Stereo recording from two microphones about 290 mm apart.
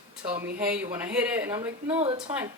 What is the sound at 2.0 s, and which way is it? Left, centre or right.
Speech, centre.